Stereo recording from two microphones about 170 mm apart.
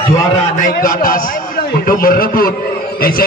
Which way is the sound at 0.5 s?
50° left (ahead or behind).